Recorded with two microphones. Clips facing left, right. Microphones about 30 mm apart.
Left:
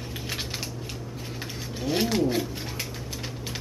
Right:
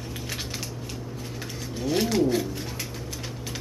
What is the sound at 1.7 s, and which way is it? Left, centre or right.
Speech, centre.